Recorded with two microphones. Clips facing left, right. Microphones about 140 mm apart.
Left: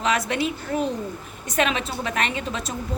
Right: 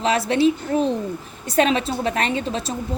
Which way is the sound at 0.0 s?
30° right (ahead or behind).